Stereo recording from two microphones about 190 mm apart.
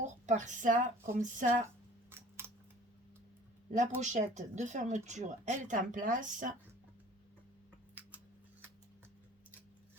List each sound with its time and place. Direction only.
0.0 s speech: 40° right (ahead or behind)
2.0 s scissors: 15° right (ahead or behind)
4.0 s speech: 40° right (ahead or behind)